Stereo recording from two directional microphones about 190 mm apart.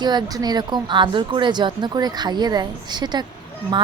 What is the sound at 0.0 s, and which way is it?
Speech, 20° right (ahead or behind).